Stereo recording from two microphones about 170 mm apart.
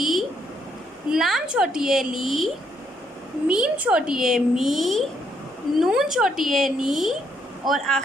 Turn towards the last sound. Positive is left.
turn(degrees=0)  # may be behind; listen again after turning